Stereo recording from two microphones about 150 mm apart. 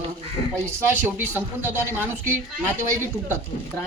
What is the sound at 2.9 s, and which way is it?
Speech, 15° right (ahead or behind).